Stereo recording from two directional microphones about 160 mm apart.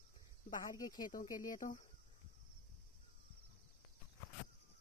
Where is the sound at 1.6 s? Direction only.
50° left (ahead or behind).